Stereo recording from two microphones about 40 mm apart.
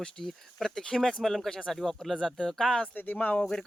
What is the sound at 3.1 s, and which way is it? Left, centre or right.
Speech, left.